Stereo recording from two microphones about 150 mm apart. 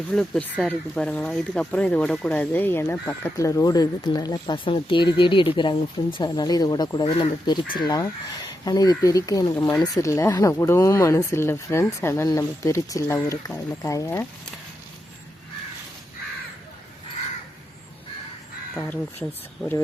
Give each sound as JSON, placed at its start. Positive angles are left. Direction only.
{"t": 0.1, "sound": "speech", "side_deg": 5}
{"t": 18.7, "sound": "speech", "side_deg": 5}